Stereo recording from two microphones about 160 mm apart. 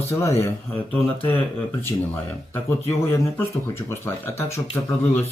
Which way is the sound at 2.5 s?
15° left (ahead or behind).